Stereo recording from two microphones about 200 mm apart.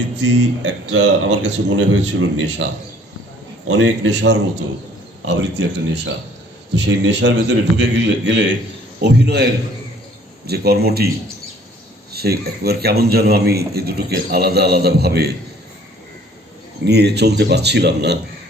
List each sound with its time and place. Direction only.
0.2 s speech: 70° right (ahead or behind)
3.7 s a man's voice: 70° right (ahead or behind); by 11.1 s 50° right (ahead or behind)
12.1 s a man's voice: 50° right (ahead or behind)
16.8 s a man's voice: 55° right (ahead or behind)